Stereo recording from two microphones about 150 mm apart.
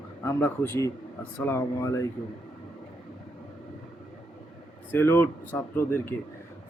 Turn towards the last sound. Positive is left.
turn(degrees=15)  # may be behind; listen again after turning